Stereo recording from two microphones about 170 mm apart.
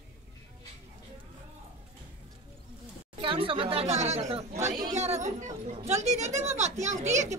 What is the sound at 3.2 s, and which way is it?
A child's voice, 30° right (ahead or behind).